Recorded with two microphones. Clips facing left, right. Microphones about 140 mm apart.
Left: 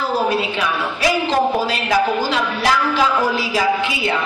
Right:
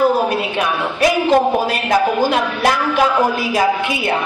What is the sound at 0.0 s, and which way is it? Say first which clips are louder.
A woman's voice: right 4 dB; 55° right (ahead or behind).